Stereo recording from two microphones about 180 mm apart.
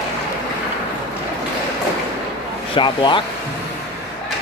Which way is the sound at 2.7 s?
25° left (ahead or behind).